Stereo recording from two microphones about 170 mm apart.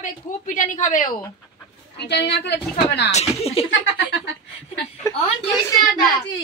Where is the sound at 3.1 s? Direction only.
35° left (ahead or behind).